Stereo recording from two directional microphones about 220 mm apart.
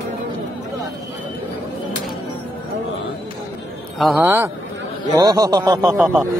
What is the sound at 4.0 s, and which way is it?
A man's voice, 5° right (ahead or behind).